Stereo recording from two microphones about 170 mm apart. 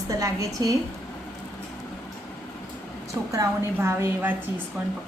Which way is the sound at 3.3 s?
15° right (ahead or behind).